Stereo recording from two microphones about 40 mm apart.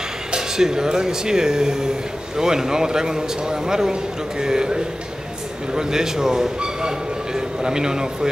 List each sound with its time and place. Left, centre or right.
0.3 s speech: centre